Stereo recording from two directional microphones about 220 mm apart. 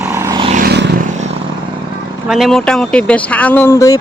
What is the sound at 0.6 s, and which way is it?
Vehicle, 50° right (ahead or behind).